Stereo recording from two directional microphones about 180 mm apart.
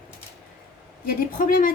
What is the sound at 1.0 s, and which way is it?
Speech, 50° left (ahead or behind).